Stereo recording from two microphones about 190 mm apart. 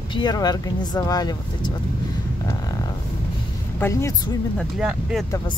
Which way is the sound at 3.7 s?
15° left (ahead or behind).